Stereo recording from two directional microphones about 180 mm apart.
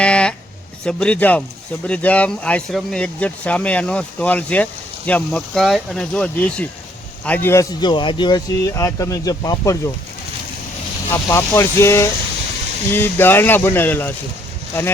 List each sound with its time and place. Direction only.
0.0 s a sound: 5° left (ahead or behind)
0.9 s speech: 5° left (ahead or behind)
11.1 s speech: 15° left (ahead or behind)